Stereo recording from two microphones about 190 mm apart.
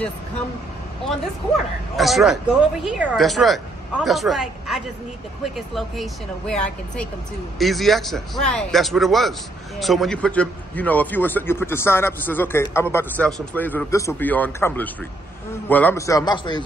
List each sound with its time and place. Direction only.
2.0 s a man's voice: centre (ahead or behind); by 16.6 s 20° left (ahead or behind)